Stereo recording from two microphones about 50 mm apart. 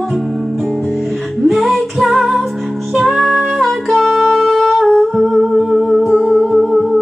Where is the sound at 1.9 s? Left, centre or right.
Centre.